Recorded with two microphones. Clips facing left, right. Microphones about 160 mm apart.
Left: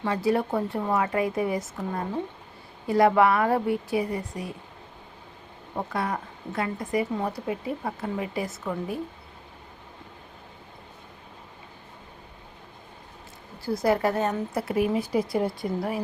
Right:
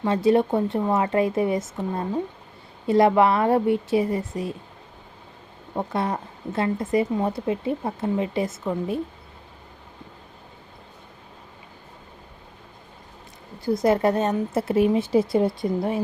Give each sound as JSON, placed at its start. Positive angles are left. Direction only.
{"t": 0.0, "sound": "a woman's voice", "side_deg": -20}
{"t": 5.7, "sound": "a woman's voice", "side_deg": -25}
{"t": 13.7, "sound": "a woman's voice", "side_deg": -20}